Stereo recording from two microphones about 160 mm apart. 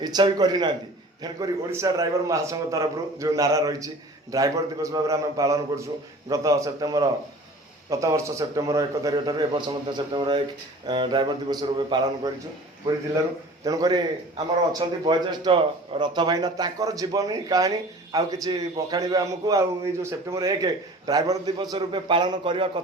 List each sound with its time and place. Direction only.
0.0 s a man's voice: 25° right (ahead or behind)
13.7 s a man's voice: 25° right (ahead or behind)